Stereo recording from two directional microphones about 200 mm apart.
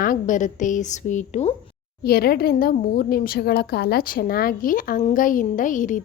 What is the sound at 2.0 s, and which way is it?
A woman's voice, 50° left (ahead or behind).